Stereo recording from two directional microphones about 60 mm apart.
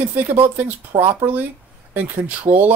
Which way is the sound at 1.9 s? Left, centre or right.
Right.